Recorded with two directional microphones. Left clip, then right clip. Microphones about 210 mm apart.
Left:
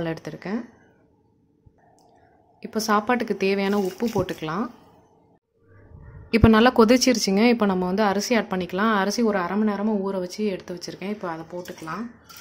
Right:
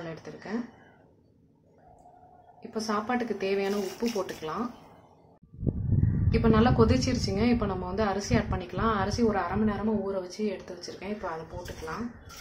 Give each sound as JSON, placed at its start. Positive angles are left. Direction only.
{"t": 0.0, "sound": "speech", "side_deg": 50}
{"t": 2.7, "sound": "a woman's voice", "side_deg": 50}
{"t": 6.3, "sound": "a woman's voice", "side_deg": 50}